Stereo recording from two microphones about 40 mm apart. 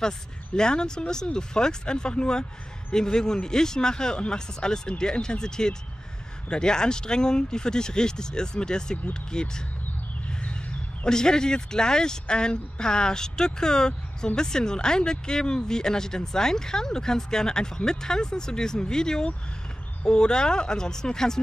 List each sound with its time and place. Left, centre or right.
0.6 s speech: centre
11.1 s speech: centre